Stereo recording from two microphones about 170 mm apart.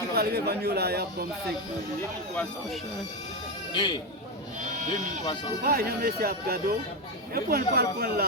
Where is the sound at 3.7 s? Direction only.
30° left (ahead or behind).